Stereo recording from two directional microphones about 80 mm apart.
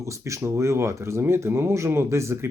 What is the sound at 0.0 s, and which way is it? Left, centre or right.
Speech, right.